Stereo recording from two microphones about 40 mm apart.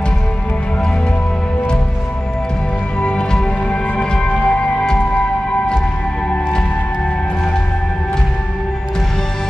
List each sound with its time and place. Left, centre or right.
3.0 s music: left